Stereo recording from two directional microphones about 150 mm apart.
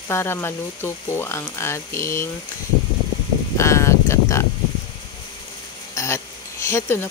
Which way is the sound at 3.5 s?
20° left (ahead or behind).